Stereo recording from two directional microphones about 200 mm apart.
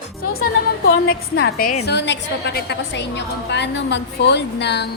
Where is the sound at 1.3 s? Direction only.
55° left (ahead or behind).